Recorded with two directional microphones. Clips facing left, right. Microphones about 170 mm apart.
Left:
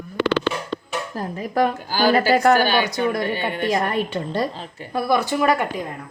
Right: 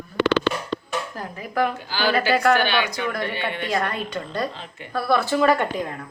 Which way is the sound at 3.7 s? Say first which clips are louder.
Left 3 dB; 25° left (ahead or behind).